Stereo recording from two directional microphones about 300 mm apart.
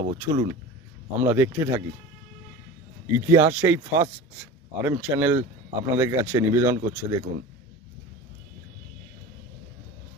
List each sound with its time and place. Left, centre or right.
0.0 s speech: centre
1.2 s speech: centre
3.2 s speech: centre